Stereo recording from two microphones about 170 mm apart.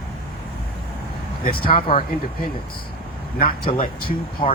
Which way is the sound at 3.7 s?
40° left (ahead or behind).